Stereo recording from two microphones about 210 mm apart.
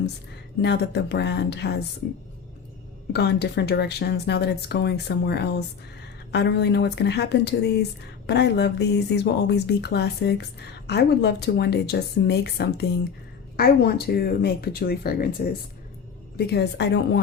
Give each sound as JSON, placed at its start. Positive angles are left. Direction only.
{"t": 0.6, "sound": "speech", "side_deg": 55}
{"t": 3.1, "sound": "speech", "side_deg": 50}
{"t": 16.5, "sound": "speech", "side_deg": 50}